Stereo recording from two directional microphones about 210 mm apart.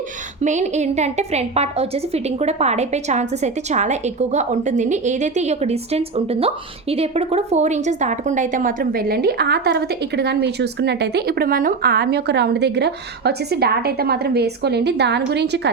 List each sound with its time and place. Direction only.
0.4 s a woman's voice: 35° right (ahead or behind); by 15.7 s 55° right (ahead or behind)